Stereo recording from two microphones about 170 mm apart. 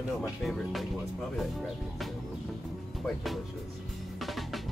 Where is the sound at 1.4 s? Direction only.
Centre (ahead or behind).